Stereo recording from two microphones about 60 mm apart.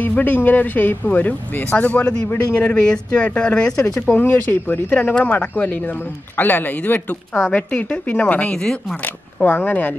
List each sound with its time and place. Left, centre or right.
0.0 s a man's voice: left
4.1 s speech: left
5.1 s a man's voice: left
8.9 s speech: left